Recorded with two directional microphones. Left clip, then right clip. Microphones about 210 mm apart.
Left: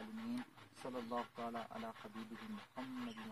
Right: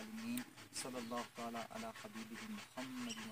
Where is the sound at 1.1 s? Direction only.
45° right (ahead or behind).